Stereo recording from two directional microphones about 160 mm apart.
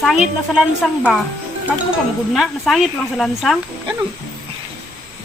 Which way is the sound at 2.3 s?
Centre (ahead or behind).